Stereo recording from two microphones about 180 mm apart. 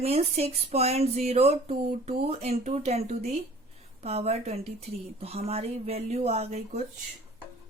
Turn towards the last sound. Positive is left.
turn(degrees=-35)  # may be behind; listen again after turning